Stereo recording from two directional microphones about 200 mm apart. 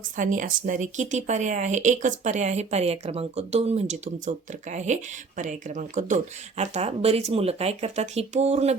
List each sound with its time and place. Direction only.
0.2 s speech: 40° right (ahead or behind)